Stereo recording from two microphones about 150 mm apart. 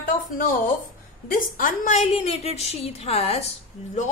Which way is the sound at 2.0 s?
45° left (ahead or behind).